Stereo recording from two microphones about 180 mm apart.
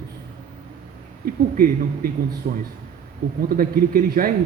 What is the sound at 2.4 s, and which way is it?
A man's voice, 50° right (ahead or behind).